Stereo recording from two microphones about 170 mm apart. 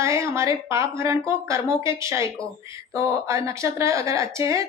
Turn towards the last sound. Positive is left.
turn(degrees=-20)  # may be behind; listen again after turning